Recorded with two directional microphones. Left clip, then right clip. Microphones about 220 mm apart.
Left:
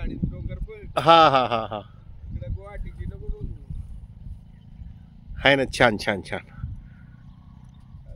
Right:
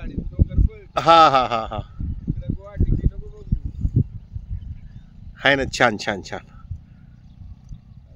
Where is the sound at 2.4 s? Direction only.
45° left (ahead or behind).